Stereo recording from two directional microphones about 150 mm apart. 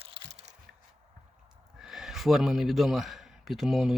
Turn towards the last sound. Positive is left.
turn(degrees=0)  # may be behind; listen again after turning